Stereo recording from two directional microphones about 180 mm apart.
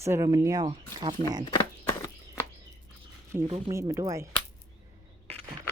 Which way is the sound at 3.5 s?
35° right (ahead or behind).